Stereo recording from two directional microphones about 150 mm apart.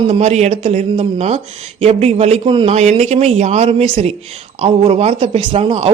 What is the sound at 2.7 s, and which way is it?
Speech, 50° right (ahead or behind).